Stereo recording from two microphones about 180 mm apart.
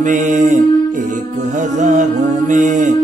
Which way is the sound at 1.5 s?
45° right (ahead or behind).